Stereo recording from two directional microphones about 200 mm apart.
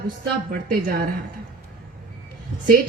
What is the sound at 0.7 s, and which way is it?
Speech, 45° right (ahead or behind).